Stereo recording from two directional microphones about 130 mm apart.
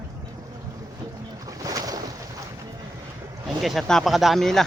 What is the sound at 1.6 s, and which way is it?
Boat, 25° right (ahead or behind).